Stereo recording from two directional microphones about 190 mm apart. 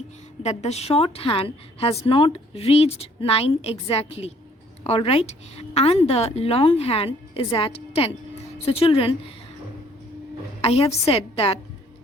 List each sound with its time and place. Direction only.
0.4 s a woman's voice: 35° left (ahead or behind)
10.6 s a woman's voice: 30° left (ahead or behind)